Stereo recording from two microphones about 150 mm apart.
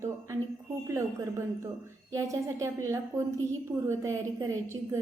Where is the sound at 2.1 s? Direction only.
20° right (ahead or behind).